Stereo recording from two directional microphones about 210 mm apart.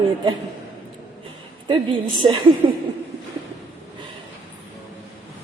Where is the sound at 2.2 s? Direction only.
20° right (ahead or behind).